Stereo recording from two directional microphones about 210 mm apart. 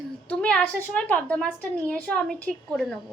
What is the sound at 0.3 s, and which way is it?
A woman's voice, 5° left (ahead or behind).